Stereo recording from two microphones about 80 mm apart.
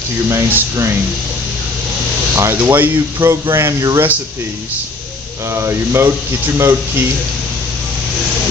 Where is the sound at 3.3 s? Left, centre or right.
Right.